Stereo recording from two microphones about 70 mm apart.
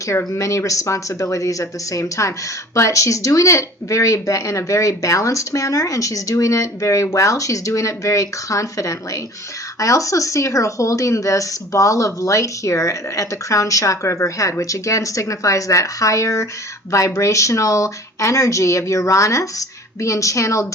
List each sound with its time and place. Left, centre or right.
0.1 s speech: left